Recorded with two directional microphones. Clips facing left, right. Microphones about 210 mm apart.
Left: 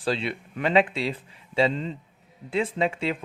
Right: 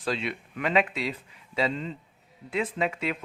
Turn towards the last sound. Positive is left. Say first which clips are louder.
# left 3 dB
turn(degrees=30)  # may be behind; listen again after turning